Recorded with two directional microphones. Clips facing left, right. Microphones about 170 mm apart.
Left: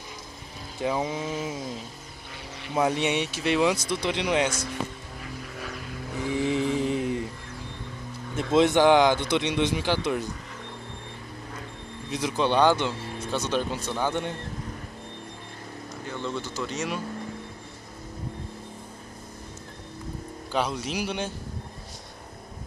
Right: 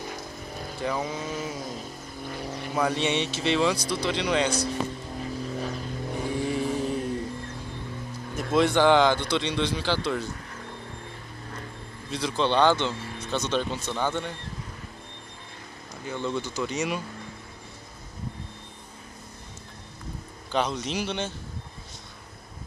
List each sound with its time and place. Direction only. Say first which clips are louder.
0.7 s speech: left 3 dB; 20° left (ahead or behind)
2.2 s speech: right 9 dB; 45° right (ahead or behind)
2.7 s speech: left 2 dB; 20° left (ahead or behind)
3.7 s speech: even; 20° left (ahead or behind)
5.2 s vehicle: right 7 dB; 30° right (ahead or behind)
6.5 s mantra: left 3 dB; 90° left
6.8 s mantra: left 2 dB; 15° left (ahead or behind)
8.4 s speech: left 2 dB; 25° left (ahead or behind)
12.1 s speech: left 1 dB; 15° left (ahead or behind)
16.2 s speech: right 3 dB; centre (ahead or behind)
20.5 s speech: right 1 dB; 5° left (ahead or behind)